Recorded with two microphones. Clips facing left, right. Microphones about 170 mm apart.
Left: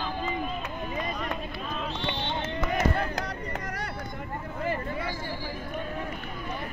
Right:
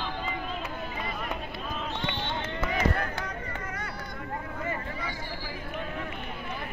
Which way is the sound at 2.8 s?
40° left (ahead or behind).